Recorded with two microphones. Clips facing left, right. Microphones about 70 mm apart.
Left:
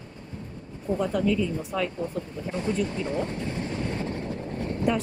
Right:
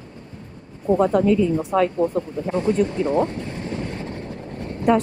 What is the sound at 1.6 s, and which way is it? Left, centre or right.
Speech, right.